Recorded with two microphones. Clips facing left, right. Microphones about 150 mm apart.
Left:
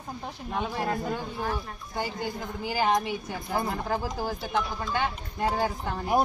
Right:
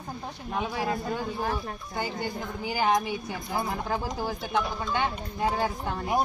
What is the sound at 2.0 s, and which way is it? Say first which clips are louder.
A woman's voice: even; 5° left (ahead or behind).